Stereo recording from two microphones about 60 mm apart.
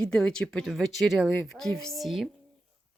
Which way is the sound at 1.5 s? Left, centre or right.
Centre.